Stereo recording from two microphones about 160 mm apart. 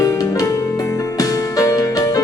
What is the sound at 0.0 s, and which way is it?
Music, 20° left (ahead or behind).